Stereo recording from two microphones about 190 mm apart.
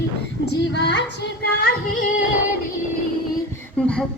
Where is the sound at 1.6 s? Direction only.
45° left (ahead or behind).